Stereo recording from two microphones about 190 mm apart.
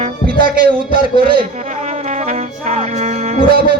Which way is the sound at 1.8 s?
35° right (ahead or behind).